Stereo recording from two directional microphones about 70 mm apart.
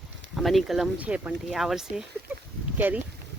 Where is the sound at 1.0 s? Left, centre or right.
Centre.